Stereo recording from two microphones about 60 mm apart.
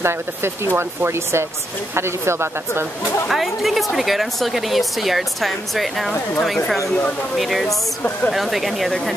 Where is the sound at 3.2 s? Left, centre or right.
Centre.